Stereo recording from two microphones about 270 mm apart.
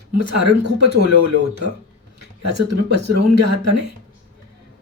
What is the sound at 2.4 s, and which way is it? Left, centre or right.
A man's voice, right.